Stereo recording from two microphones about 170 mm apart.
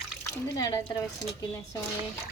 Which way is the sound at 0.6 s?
25° left (ahead or behind).